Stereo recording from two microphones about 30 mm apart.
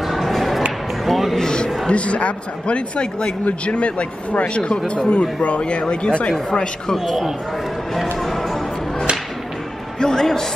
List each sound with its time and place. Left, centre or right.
0.0 s a sound: centre
1.9 s a man's voice: left
3.4 s speech: left
4.6 s a man's voice: left
7.9 s music: centre
9.9 s a man's voice: left